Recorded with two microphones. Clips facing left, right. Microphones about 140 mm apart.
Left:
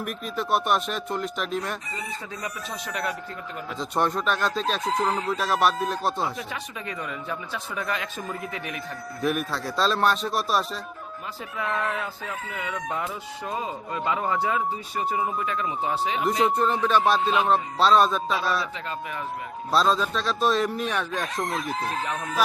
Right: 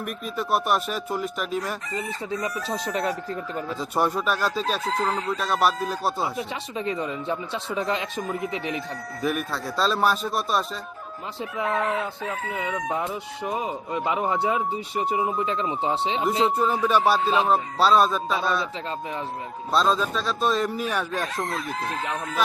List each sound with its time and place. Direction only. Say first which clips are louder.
0.0 s speech: even; centre (ahead or behind)
2.4 s speech: right 6 dB; 35° right (ahead or behind)
3.8 s speech: even; 5° right (ahead or behind)
6.2 s speech: right 2 dB; 25° right (ahead or behind)
9.2 s speech: left 1 dB; centre (ahead or behind)
11.5 s speech: right 3 dB; 20° right (ahead or behind)
16.6 s music: right 1 dB; 5° right (ahead or behind)
17.4 s speech: even; 5° right (ahead or behind)
19.7 s speech: even; centre (ahead or behind)